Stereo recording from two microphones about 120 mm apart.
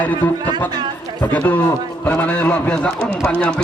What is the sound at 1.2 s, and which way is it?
A man's voice, 15° left (ahead or behind).